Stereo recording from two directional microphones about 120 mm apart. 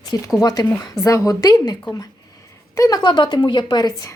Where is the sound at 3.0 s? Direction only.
40° left (ahead or behind).